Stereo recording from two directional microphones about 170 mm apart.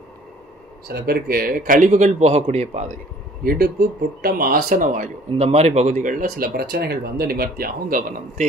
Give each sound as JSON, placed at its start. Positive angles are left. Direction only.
{"t": 0.8, "sound": "a man's voice", "side_deg": -65}
{"t": 3.4, "sound": "speech", "side_deg": -60}